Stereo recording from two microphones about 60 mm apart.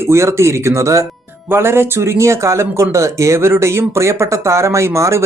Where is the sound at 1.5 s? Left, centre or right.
Right.